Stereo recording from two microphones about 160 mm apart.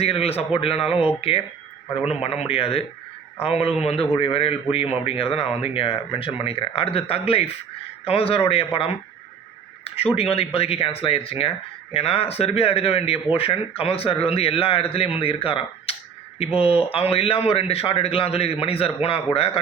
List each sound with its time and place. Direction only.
0.0 s speech: 40° left (ahead or behind)